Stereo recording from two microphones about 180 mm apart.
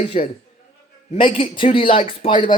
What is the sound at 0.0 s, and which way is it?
A man's voice, 40° left (ahead or behind).